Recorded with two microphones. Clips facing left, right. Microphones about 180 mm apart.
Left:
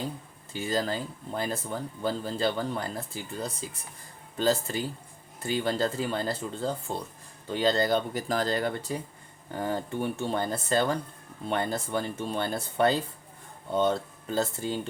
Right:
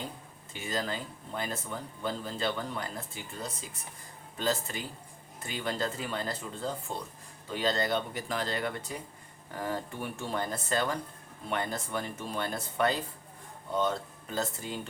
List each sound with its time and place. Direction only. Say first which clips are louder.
0.5 s speech: left 5 dB; 35° left (ahead or behind)